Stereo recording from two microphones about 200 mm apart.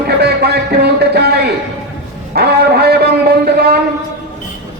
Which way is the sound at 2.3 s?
55° right (ahead or behind).